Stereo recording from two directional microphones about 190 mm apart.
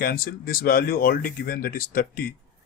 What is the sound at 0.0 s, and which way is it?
Speech, 50° left (ahead or behind).